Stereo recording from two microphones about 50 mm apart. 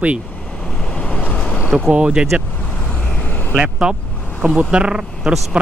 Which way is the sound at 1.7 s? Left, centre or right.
Right.